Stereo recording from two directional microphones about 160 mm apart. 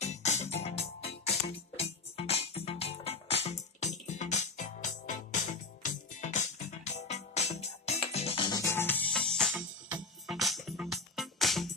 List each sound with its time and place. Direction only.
0.0 s music: 45° left (ahead or behind); by 9.6 s 5° left (ahead or behind)
9.6 s music: 5° right (ahead or behind)